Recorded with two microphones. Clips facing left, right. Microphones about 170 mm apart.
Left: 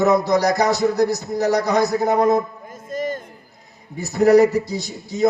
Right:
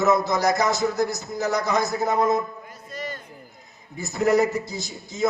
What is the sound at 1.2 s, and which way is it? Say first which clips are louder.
Speech: left 6 dB; 65° left (ahead or behind).